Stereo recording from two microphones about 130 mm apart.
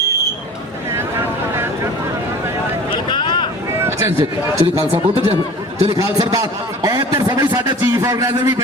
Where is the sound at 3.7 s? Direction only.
20° right (ahead or behind).